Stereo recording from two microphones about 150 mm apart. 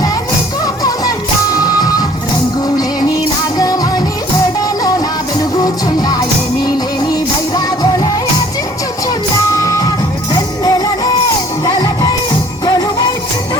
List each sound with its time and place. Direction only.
0.8 s music: 25° left (ahead or behind)
3.6 s music: 25° left (ahead or behind)
9.6 s music: 20° left (ahead or behind)